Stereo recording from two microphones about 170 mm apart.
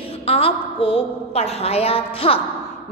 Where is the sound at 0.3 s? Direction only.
35° left (ahead or behind).